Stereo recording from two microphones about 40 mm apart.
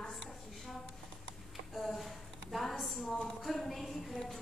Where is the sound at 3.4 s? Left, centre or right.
Centre.